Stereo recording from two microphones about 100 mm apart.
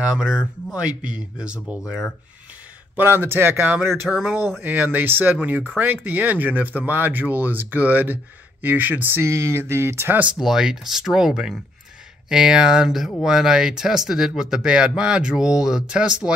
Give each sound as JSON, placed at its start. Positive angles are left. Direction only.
{"t": 0.0, "sound": "speech", "side_deg": -5}
{"t": 3.0, "sound": "speech", "side_deg": -20}
{"t": 10.3, "sound": "speech", "side_deg": -5}